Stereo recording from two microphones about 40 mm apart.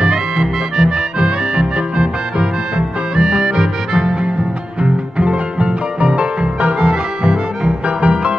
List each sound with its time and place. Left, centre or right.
0.0 s music: centre
4.8 s music: right